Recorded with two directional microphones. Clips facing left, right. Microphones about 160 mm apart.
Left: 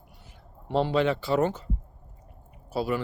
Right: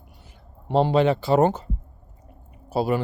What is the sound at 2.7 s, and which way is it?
Speech, 35° right (ahead or behind).